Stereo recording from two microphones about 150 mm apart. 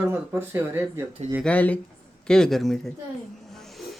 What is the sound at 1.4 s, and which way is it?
Speech, 10° left (ahead or behind).